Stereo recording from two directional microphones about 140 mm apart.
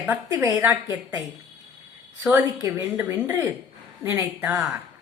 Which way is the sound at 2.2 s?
25° right (ahead or behind).